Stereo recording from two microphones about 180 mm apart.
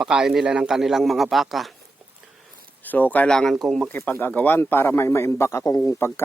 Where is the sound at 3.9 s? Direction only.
10° left (ahead or behind).